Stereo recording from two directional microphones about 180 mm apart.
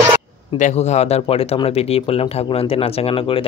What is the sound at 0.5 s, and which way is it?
Speech, 40° left (ahead or behind).